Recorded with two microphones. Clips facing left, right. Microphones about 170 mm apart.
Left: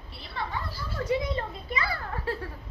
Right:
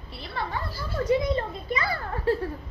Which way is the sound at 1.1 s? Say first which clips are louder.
Right 4 dB; 45° right (ahead or behind).